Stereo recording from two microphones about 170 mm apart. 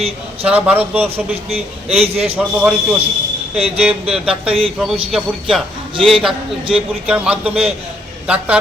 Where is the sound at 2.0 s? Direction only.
35° right (ahead or behind).